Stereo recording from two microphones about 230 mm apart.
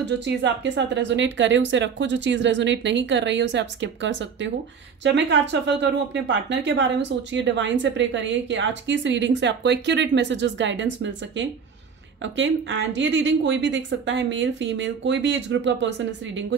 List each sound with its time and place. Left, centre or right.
0.2 s speech: right